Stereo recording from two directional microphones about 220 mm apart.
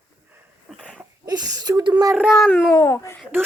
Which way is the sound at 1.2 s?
20° right (ahead or behind).